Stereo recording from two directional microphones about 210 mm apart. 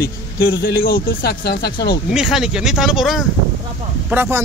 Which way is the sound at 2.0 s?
5° right (ahead or behind).